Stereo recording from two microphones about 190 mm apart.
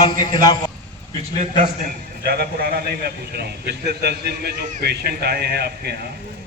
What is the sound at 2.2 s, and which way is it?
A man's voice, 60° right (ahead or behind).